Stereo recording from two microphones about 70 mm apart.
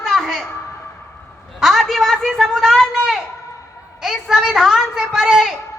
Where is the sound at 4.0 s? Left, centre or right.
Centre.